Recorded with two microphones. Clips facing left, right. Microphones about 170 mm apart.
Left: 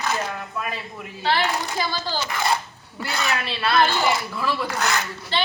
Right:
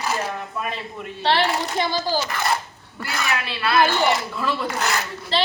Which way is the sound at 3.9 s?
5° left (ahead or behind).